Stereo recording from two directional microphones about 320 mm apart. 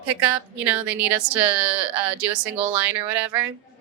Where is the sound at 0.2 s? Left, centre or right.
Centre.